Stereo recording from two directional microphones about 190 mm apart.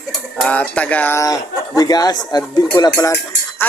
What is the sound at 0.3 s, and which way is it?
Speech, 5° left (ahead or behind).